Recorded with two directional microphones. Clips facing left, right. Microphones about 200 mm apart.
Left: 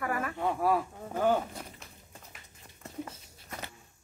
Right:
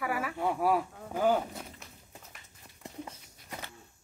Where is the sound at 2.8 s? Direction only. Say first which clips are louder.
Left 2 dB; 15° right (ahead or behind).